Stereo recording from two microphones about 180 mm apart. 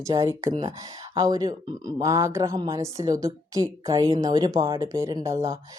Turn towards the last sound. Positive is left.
turn(degrees=-15)  # may be behind; listen again after turning